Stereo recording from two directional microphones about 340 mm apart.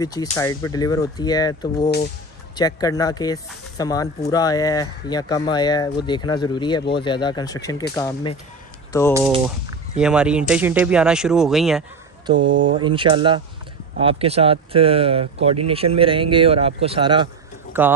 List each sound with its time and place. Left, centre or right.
0.0 s speech: centre
9.4 s speech: centre
12.4 s speech: right
12.7 s speech: centre